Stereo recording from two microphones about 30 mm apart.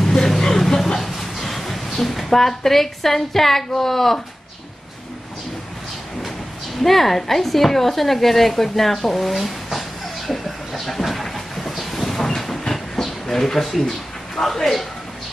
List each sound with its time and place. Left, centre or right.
0.0 s vehicle: centre
1.1 s a woman's voice: centre
6.8 s speech: centre
11.9 s a sound: centre
13.7 s speech: centre